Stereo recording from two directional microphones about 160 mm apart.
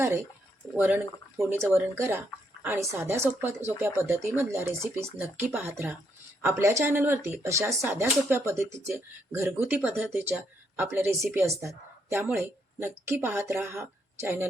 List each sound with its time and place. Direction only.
0.8 s speech: 15° right (ahead or behind)